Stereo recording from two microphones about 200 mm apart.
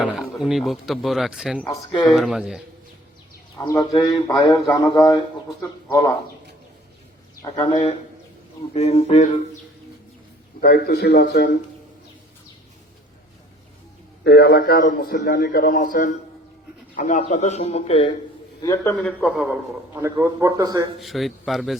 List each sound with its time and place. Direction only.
0.4 s speech: centre (ahead or behind)
1.6 s speech: 20° left (ahead or behind)
2.0 s speech: centre (ahead or behind)
3.6 s speech: 20° left (ahead or behind)
7.4 s a man's voice: 25° left (ahead or behind)
10.6 s a man's voice: 50° left (ahead or behind)
14.3 s a man's voice: 55° left (ahead or behind); by 18.1 s 30° left (ahead or behind)
18.6 s speech: 15° left (ahead or behind)
19.0 s speech: centre (ahead or behind)
19.9 s a man's voice: 15° right (ahead or behind)
21.0 s speech: centre (ahead or behind)